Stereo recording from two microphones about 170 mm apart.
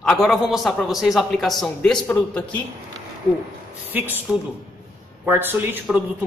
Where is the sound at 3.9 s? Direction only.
10° right (ahead or behind).